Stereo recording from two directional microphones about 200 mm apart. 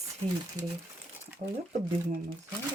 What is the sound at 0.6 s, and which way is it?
Speech, 40° right (ahead or behind).